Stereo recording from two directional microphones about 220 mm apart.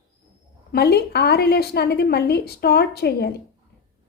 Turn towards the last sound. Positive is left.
turn(degrees=50)  # may be behind; listen again after turning